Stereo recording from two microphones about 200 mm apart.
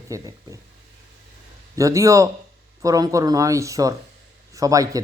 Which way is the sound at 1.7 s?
15° right (ahead or behind).